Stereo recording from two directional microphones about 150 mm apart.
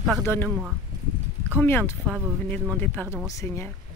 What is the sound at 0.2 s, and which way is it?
Speech, 15° left (ahead or behind).